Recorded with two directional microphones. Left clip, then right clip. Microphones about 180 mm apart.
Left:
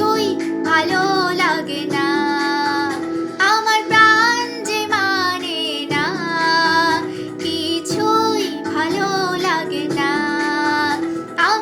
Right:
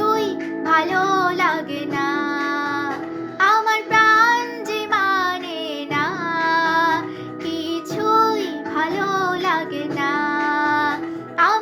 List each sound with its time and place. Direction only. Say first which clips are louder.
0.0 s music: left 2 dB; 5° left (ahead or behind)
3.4 s child singing: left 1 dB; 5° left (ahead or behind)
5.9 s music: even; 5° left (ahead or behind)